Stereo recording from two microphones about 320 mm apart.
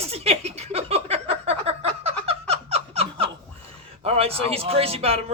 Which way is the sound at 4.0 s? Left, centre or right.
Centre.